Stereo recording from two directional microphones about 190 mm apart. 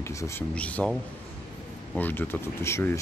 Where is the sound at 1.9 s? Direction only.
10° left (ahead or behind).